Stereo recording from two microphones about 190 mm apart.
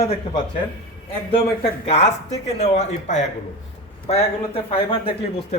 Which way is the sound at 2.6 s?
35° left (ahead or behind).